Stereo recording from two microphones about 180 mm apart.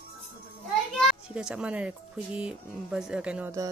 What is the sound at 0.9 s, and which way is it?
Music, 5° right (ahead or behind).